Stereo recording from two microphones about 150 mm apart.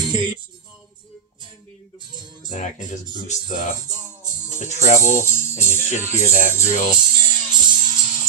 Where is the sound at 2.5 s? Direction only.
50° left (ahead or behind).